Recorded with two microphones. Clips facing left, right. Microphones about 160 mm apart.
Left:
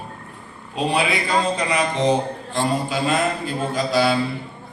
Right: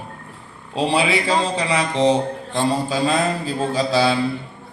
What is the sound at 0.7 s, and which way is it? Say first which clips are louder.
A man's voice: right 2 dB; 30° right (ahead or behind).